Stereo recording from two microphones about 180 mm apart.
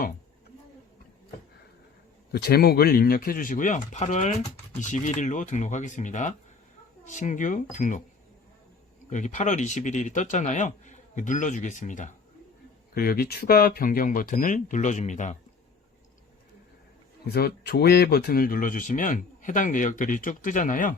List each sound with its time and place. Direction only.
2.3 s speech: 60° left (ahead or behind)
9.0 s speech: 45° left (ahead or behind)
12.9 s speech: 55° left (ahead or behind); by 15.4 s 40° left (ahead or behind)
17.3 s speech: 60° left (ahead or behind)